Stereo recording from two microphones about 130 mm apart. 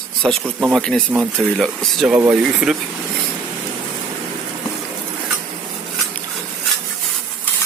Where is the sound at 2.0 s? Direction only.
15° right (ahead or behind).